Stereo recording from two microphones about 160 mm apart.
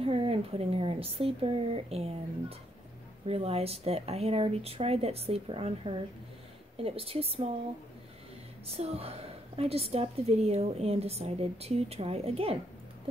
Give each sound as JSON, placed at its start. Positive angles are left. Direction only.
{"t": 0.0, "sound": "a woman's voice", "side_deg": -35}
{"t": 3.3, "sound": "a woman's voice", "side_deg": -40}
{"t": 8.6, "sound": "a woman's voice", "side_deg": -40}